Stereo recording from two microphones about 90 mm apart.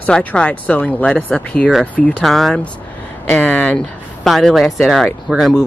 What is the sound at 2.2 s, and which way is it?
Speech, centre (ahead or behind).